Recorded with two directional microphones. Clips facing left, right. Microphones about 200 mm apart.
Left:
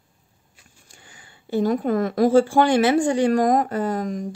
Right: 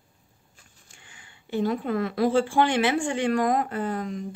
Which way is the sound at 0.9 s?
40° left (ahead or behind).